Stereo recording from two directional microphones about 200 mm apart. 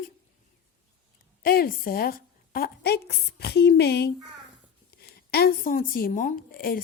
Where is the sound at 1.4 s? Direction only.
50° left (ahead or behind).